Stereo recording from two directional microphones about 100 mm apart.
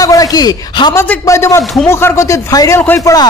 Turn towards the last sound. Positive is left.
turn(degrees=35)  # may be behind; listen again after turning